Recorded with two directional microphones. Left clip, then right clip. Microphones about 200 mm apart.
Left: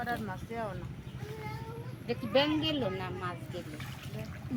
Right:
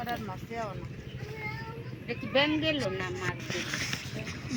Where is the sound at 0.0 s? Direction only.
10° right (ahead or behind).